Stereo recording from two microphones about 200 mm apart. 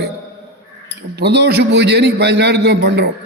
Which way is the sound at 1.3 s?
55° right (ahead or behind).